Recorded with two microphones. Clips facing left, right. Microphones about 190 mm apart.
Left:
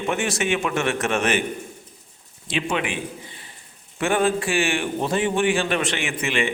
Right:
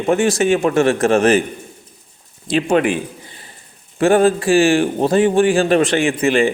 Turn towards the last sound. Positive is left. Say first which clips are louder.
# right 10 dB
turn(degrees=-35)  # may be behind; listen again after turning